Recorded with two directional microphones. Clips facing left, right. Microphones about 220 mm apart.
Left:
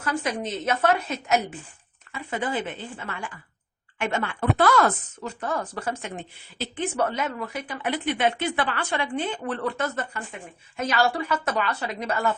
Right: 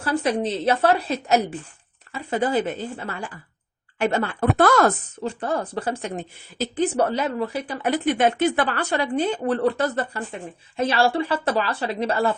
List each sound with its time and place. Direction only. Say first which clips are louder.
0.0 s speech: right 5 dB; 35° right (ahead or behind)